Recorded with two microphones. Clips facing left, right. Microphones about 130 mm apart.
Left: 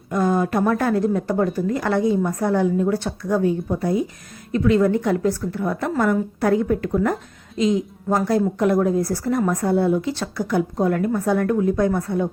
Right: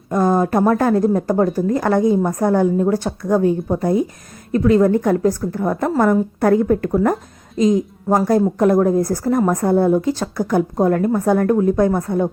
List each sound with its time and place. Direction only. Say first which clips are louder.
0.1 s a woman's voice: right 4 dB; 40° right (ahead or behind)